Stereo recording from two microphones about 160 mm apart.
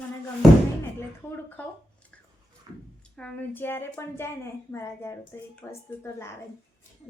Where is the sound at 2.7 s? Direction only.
25° right (ahead or behind).